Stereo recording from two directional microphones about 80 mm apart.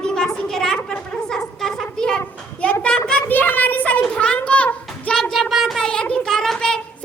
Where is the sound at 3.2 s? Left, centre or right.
Left.